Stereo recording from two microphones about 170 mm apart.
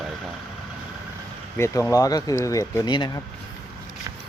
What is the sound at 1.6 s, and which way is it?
Speech, 15° left (ahead or behind).